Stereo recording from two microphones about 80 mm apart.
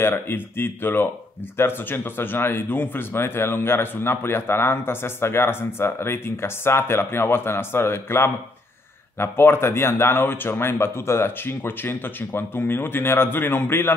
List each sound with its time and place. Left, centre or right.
0.0 s speech: left